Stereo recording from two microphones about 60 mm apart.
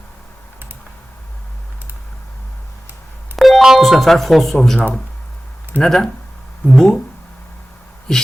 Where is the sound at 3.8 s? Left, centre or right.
Centre.